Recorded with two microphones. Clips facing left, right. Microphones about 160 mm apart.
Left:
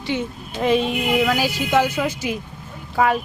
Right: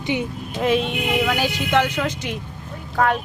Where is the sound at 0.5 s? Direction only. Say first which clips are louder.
Left 1 dB; centre (ahead or behind).